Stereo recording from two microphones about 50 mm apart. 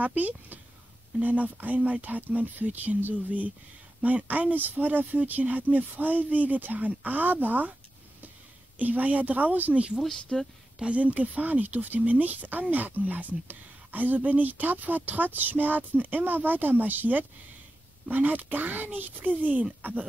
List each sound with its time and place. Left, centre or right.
0.0 s speech: right
8.7 s speech: right
10.0 s speech: centre
10.8 s speech: right